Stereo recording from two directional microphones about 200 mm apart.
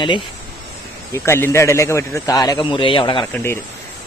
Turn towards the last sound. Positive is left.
turn(degrees=10)  # may be behind; listen again after turning